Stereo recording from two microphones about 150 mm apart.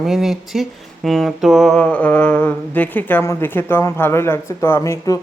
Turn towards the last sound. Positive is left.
turn(degrees=20)  # may be behind; listen again after turning